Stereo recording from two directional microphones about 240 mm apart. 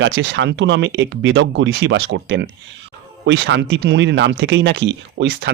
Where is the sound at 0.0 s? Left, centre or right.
Right.